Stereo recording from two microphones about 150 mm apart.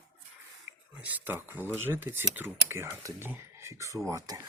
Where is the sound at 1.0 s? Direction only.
10° right (ahead or behind).